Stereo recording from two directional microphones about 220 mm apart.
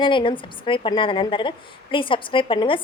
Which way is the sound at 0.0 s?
20° left (ahead or behind).